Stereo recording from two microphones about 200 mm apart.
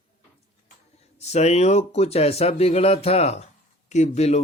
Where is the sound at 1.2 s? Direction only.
35° left (ahead or behind).